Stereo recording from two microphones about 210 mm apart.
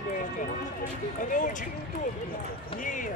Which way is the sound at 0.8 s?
40° left (ahead or behind).